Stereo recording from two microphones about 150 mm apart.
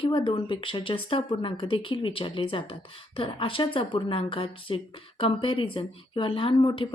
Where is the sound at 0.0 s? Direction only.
35° left (ahead or behind).